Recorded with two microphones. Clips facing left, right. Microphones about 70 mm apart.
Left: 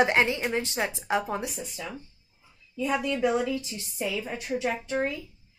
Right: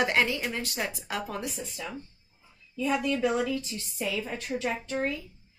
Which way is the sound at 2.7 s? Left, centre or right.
Centre.